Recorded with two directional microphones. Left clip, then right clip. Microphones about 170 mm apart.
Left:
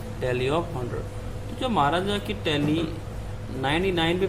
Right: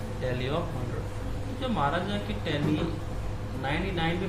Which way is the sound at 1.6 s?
45° left (ahead or behind).